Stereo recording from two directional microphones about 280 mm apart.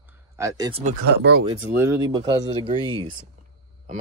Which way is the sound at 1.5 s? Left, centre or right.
Centre.